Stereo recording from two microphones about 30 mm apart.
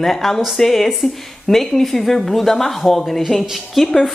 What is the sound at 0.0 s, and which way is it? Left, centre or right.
Speech, centre.